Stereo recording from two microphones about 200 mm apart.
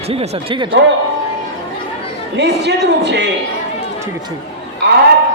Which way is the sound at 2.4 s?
60° right (ahead or behind).